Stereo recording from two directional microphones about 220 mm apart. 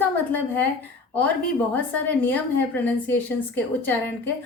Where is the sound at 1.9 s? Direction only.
5° left (ahead or behind).